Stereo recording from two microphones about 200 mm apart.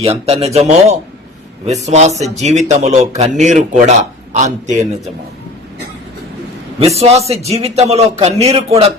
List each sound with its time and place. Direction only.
0.0 s a man's voice: 30° right (ahead or behind)
1.6 s a man's voice: 35° right (ahead or behind)
6.7 s a man's voice: 30° right (ahead or behind)